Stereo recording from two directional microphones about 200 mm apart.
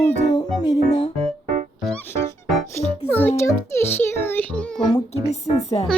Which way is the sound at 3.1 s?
10° left (ahead or behind).